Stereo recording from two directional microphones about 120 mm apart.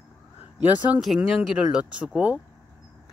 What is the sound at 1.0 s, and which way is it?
Speech, centre (ahead or behind).